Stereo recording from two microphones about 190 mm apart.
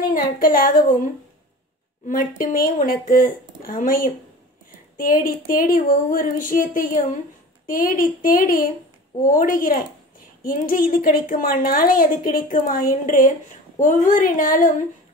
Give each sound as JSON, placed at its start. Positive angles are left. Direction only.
{"t": 0.1, "sound": "a woman's voice", "side_deg": 45}
{"t": 2.0, "sound": "a woman's voice", "side_deg": 45}